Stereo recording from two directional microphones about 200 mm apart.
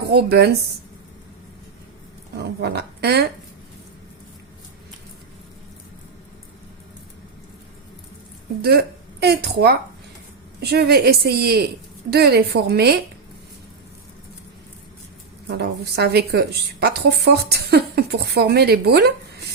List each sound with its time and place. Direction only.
0.1 s a woman's voice: 55° right (ahead or behind)
2.3 s speech: 55° right (ahead or behind)
8.6 s a woman's voice: 50° right (ahead or behind)
15.4 s a woman's voice: 55° right (ahead or behind)